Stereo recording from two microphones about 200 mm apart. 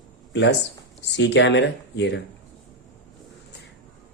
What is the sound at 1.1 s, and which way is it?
Speech, 60° left (ahead or behind).